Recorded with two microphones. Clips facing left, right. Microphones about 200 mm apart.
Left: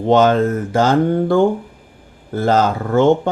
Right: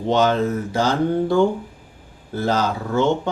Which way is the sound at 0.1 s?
50° left (ahead or behind).